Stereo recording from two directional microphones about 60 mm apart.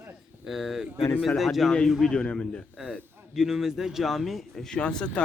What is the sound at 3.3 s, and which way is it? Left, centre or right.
A man's voice, centre.